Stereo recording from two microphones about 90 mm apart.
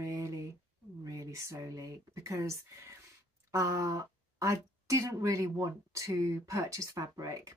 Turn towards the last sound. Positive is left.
turn(degrees=-40)  # may be behind; listen again after turning